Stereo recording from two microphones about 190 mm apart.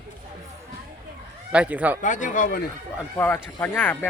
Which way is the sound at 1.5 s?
5° right (ahead or behind).